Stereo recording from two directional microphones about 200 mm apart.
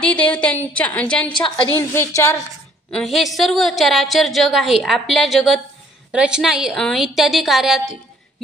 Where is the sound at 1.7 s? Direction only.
10° left (ahead or behind).